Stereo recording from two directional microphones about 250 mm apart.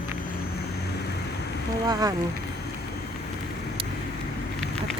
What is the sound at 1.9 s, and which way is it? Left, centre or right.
Speech, centre.